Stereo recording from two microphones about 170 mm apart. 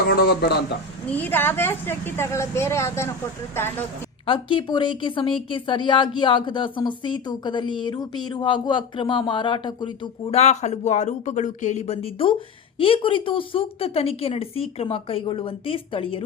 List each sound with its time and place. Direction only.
0.1 s a man's voice: 70° left (ahead or behind)
1.1 s a woman's voice: 10° left (ahead or behind)
4.3 s a woman's voice: 30° left (ahead or behind)